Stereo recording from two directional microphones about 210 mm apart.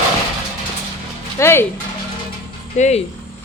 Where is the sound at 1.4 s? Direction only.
10° left (ahead or behind).